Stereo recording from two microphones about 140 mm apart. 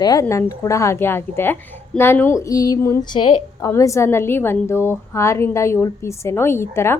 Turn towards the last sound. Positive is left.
turn(degrees=20)  # may be behind; listen again after turning